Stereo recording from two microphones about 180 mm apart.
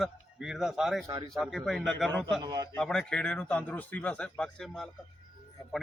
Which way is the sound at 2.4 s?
20° right (ahead or behind).